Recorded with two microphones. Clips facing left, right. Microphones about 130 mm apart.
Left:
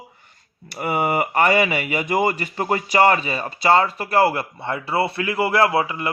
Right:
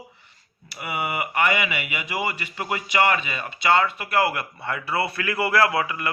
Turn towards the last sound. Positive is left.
turn(degrees=25)  # may be behind; listen again after turning